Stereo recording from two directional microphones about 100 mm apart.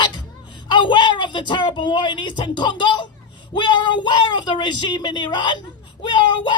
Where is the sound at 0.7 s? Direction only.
50° left (ahead or behind).